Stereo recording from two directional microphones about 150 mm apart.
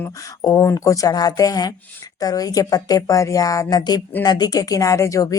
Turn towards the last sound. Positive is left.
turn(degrees=20)  # may be behind; listen again after turning